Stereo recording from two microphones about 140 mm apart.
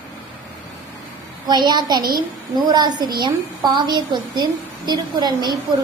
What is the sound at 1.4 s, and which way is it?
A woman's voice, 30° right (ahead or behind).